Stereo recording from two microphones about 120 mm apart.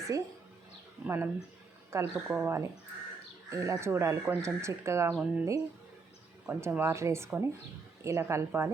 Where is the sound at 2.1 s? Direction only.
15° right (ahead or behind).